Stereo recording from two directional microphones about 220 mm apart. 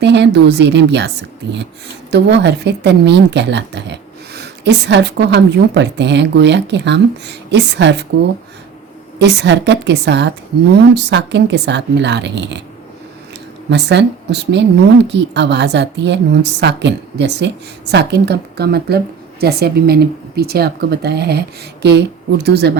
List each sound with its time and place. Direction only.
0.0 s a woman's voice: 50° right (ahead or behind)
9.1 s a woman's voice: 50° right (ahead or behind)
13.7 s a woman's voice: 50° right (ahead or behind)